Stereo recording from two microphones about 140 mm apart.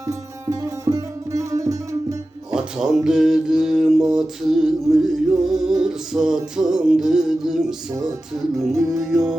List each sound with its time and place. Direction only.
0.9 s music: 25° right (ahead or behind)
2.5 s music: 5° right (ahead or behind)